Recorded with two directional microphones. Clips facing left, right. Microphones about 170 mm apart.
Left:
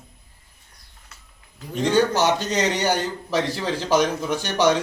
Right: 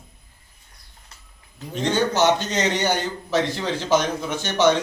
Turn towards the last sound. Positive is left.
turn(degrees=10)  # may be behind; listen again after turning